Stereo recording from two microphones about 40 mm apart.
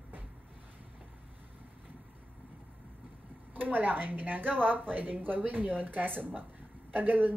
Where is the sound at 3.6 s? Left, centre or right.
Right.